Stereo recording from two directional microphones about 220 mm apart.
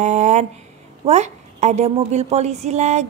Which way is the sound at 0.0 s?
30° right (ahead or behind).